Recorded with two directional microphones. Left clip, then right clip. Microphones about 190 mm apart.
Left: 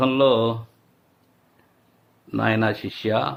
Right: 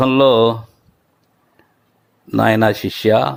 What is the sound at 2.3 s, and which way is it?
Speech, 40° right (ahead or behind).